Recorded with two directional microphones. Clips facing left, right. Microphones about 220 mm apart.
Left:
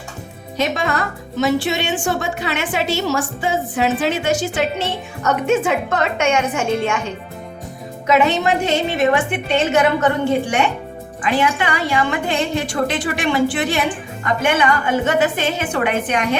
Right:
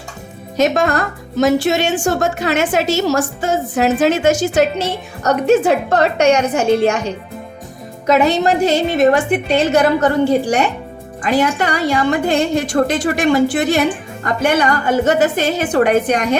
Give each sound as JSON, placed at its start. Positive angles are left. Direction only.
{"t": 0.5, "sound": "a woman's voice", "side_deg": -45}